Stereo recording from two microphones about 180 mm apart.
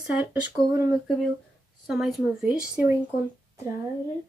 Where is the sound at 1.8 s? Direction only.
Centre (ahead or behind).